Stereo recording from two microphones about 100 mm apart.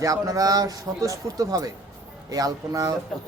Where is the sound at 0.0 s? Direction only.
35° right (ahead or behind).